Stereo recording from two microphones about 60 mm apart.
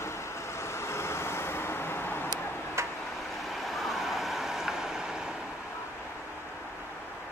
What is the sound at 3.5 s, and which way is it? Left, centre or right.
Vehicle, centre.